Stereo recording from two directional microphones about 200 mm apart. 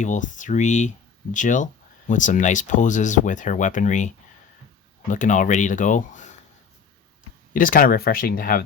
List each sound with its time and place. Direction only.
0.0 s speech: 40° left (ahead or behind)
7.5 s speech: 45° left (ahead or behind)